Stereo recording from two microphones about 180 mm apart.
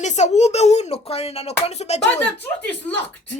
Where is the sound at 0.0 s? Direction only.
40° left (ahead or behind).